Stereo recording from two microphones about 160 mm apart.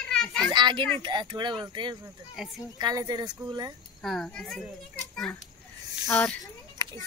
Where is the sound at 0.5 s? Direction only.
30° right (ahead or behind).